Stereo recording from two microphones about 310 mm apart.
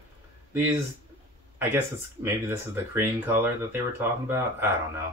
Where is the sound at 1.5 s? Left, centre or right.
Centre.